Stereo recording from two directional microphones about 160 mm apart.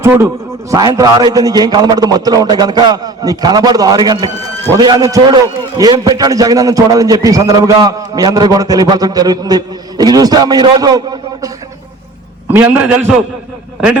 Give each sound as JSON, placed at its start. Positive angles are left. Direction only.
{"t": 0.0, "sound": "a man's voice", "side_deg": -15}
{"t": 12.5, "sound": "a man's voice", "side_deg": -10}